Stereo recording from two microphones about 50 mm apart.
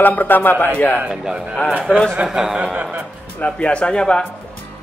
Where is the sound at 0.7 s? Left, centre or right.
Left.